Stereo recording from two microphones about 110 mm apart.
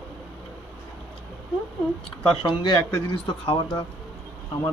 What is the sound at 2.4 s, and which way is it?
Speech, 45° left (ahead or behind).